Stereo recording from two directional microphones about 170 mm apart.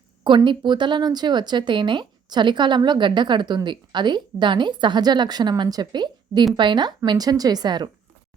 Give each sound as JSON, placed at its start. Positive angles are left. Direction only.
{"t": 0.3, "sound": "a woman's voice", "side_deg": -30}